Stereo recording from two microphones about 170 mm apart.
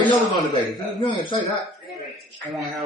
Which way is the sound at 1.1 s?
30° left (ahead or behind).